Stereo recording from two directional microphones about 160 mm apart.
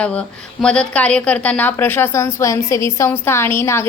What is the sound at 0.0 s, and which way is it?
Speech, 5° left (ahead or behind).